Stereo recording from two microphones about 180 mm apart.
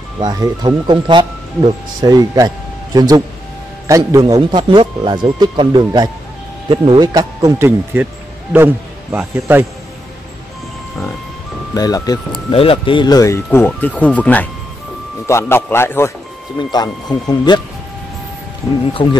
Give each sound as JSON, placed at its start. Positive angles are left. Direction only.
{"t": 0.2, "sound": "a man's voice", "side_deg": -20}
{"t": 11.7, "sound": "speech", "side_deg": 20}
{"t": 19.0, "sound": "speech", "side_deg": 25}